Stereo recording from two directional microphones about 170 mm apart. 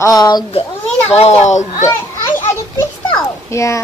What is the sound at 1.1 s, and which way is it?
Speech, 40° left (ahead or behind).